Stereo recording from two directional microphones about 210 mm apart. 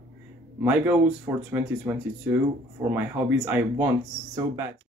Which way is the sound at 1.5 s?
10° right (ahead or behind).